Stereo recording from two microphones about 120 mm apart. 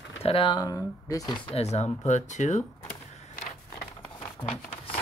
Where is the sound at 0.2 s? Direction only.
50° left (ahead or behind).